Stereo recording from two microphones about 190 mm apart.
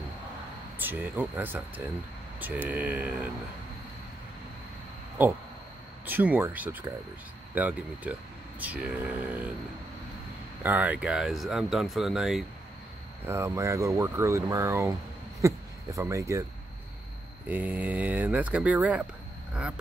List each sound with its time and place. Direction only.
0.7 s speech: 10° right (ahead or behind)
5.2 s speech: 10° right (ahead or behind)
10.6 s speech: 10° right (ahead or behind)
13.2 s speech: 15° right (ahead or behind)
17.5 s speech: 10° right (ahead or behind)